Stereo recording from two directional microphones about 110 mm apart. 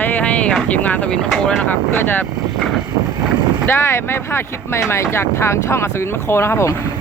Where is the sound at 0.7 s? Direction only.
15° left (ahead or behind).